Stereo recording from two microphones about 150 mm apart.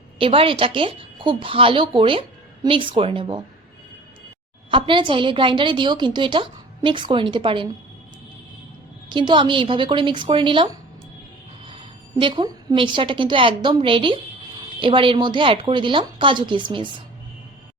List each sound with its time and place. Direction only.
0.2 s a woman's voice: 35° right (ahead or behind)
4.7 s a woman's voice: 35° right (ahead or behind)
9.0 s a woman's voice: 30° right (ahead or behind)